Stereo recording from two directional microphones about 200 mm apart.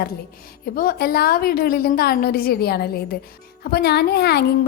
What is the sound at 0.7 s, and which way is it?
A woman's voice, 45° left (ahead or behind).